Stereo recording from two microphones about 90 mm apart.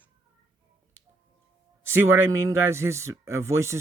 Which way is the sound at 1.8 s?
25° right (ahead or behind).